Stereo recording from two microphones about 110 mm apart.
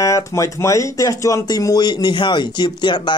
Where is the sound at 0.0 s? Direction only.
30° left (ahead or behind).